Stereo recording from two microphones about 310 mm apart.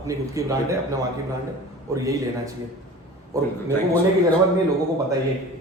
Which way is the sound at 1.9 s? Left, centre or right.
Centre.